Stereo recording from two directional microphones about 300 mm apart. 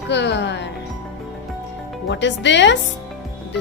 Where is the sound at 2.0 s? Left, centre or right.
Left.